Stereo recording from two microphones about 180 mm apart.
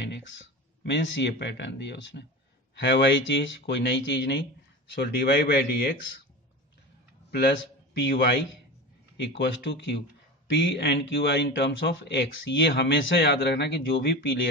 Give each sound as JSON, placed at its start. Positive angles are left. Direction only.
{"t": 0.0, "sound": "speech", "side_deg": 85}
{"t": 7.2, "sound": "a man's voice", "side_deg": 65}
{"t": 9.1, "sound": "speech", "side_deg": 80}